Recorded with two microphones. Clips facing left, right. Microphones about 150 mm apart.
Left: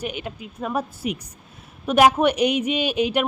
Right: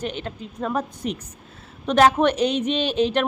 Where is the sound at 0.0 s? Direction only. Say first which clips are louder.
Right 1 dB; 10° left (ahead or behind).